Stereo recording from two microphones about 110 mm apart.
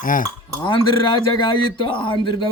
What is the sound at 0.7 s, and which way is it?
A man's voice, 50° left (ahead or behind).